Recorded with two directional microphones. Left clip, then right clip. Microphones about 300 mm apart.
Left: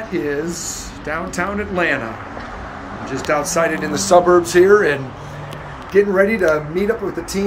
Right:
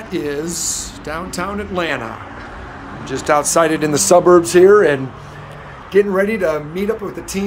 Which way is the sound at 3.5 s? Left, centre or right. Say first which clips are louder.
Right 4 dB; centre.